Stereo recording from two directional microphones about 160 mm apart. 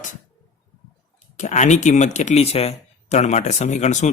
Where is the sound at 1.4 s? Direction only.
45° left (ahead or behind).